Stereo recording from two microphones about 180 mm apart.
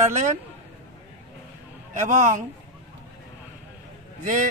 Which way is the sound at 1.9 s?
45° right (ahead or behind).